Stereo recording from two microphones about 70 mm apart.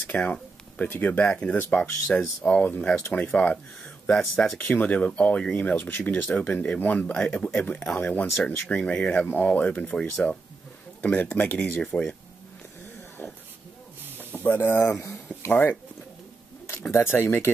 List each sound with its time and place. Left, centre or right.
0.0 s speech: left
2.4 s speech: left
3.3 s speech: centre
4.6 s speech: left
7.9 s speech: left
11.8 s speech: centre
14.3 s speech: left
16.9 s speech: left